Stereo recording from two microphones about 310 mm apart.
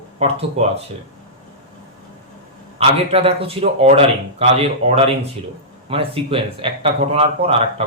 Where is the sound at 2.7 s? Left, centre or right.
Centre.